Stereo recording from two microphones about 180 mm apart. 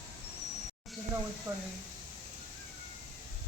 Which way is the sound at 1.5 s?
15° right (ahead or behind).